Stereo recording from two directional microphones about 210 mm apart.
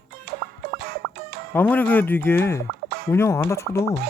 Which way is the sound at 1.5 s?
10° left (ahead or behind).